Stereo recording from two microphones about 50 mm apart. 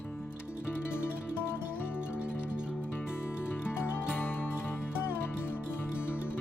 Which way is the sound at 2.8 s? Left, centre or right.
Left.